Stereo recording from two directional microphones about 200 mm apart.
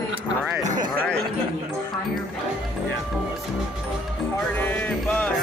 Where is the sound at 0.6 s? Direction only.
40° right (ahead or behind).